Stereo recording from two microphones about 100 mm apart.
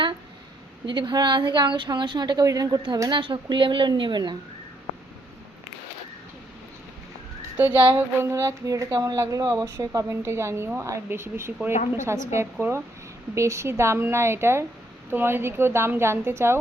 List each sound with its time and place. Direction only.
0.9 s a woman's voice: 50° right (ahead or behind)
7.5 s speech: 20° right (ahead or behind)